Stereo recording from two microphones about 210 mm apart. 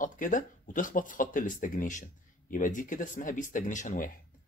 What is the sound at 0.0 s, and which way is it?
Speech, 40° left (ahead or behind).